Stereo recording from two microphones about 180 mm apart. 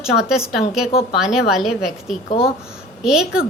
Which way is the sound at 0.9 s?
35° left (ahead or behind).